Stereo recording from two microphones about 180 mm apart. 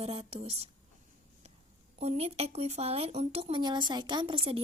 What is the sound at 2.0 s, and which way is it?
Speech, 35° right (ahead or behind).